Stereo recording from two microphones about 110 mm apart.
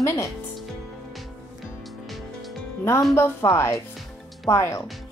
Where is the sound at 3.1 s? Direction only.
25° left (ahead or behind).